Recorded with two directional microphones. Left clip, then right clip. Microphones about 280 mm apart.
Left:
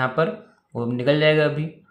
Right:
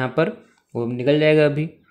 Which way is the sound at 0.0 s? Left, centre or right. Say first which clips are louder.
Even; right.